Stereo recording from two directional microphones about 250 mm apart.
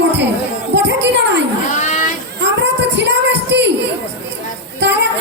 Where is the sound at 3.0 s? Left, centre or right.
Right.